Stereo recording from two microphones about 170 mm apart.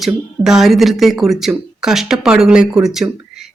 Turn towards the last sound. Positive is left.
turn(degrees=0)  # may be behind; listen again after turning